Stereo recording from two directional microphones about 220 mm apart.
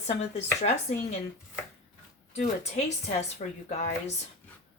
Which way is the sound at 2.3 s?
30° left (ahead or behind).